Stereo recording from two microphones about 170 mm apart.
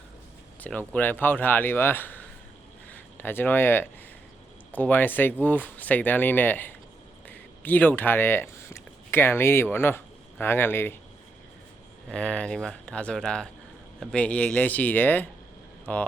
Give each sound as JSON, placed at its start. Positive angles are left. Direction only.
{"t": 0.6, "sound": "speech", "side_deg": 10}
{"t": 12.0, "sound": "speech", "side_deg": 5}